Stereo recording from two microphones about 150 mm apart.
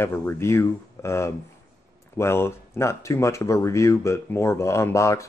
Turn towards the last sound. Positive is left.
turn(degrees=20)  # may be behind; listen again after turning